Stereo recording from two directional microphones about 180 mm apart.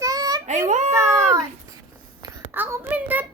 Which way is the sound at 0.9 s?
15° right (ahead or behind).